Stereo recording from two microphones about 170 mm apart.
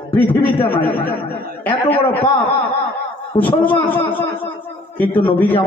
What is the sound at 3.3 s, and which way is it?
Speech, 10° left (ahead or behind).